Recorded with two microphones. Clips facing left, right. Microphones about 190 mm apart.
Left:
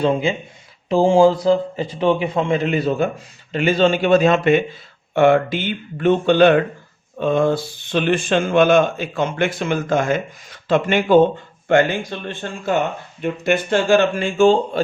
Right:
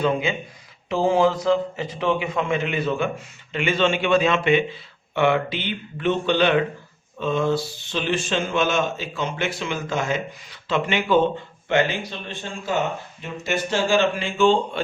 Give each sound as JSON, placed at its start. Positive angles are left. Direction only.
{"t": 0.0, "sound": "a man's voice", "side_deg": 30}